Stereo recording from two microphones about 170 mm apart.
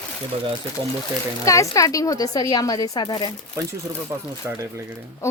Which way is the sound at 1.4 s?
20° left (ahead or behind).